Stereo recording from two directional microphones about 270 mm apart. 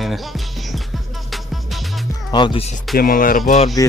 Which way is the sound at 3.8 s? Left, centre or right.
Centre.